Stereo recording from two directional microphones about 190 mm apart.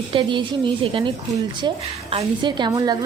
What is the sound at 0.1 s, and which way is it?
A woman's voice, 25° right (ahead or behind).